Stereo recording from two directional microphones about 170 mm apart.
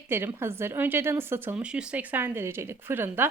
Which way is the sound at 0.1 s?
15° right (ahead or behind).